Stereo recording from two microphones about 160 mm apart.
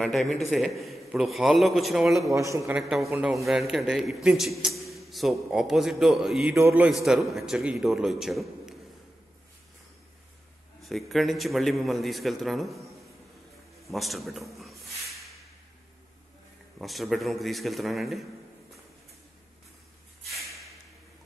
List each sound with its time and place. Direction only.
0.0 s a man's voice: centre (ahead or behind)
2.3 s speech: 20° right (ahead or behind)
2.7 s a man's voice: centre (ahead or behind)
10.8 s a man's voice: centre (ahead or behind)
13.8 s a sound: centre (ahead or behind)
16.7 s a man's voice: centre (ahead or behind)